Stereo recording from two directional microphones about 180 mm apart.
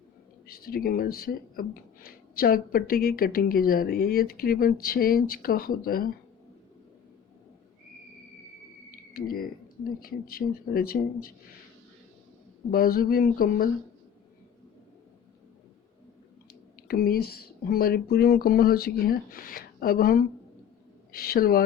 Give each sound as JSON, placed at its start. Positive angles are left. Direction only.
{"t": 0.4, "sound": "speech", "side_deg": 55}
{"t": 9.1, "sound": "speech", "side_deg": 55}
{"t": 12.7, "sound": "speech", "side_deg": 55}
{"t": 16.5, "sound": "speech", "side_deg": 55}